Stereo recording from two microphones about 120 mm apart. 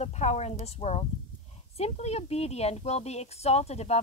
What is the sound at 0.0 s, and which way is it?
A woman's voice, 70° left (ahead or behind).